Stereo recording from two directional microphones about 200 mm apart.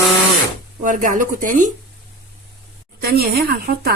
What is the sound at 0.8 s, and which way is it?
Speech, 40° right (ahead or behind).